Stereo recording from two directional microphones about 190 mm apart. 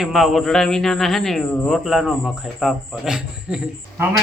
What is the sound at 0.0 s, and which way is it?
A man's voice, centre (ahead or behind).